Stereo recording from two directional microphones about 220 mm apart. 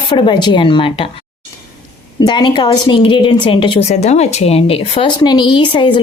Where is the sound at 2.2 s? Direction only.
20° left (ahead or behind).